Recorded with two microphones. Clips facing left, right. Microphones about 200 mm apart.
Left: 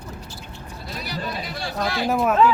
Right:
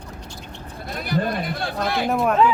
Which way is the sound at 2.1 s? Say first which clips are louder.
Left 1 dB; centre (ahead or behind).